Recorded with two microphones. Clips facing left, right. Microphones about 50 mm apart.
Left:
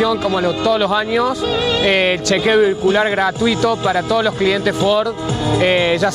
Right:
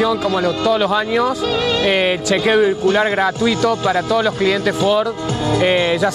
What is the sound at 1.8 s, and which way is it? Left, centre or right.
Speech, left.